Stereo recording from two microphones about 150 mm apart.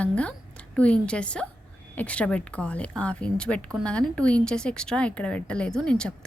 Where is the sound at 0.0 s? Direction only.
10° left (ahead or behind).